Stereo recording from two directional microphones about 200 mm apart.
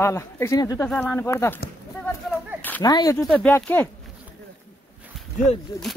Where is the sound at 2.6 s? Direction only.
10° left (ahead or behind).